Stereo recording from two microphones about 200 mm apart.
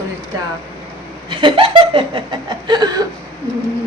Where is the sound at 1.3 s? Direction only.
25° right (ahead or behind).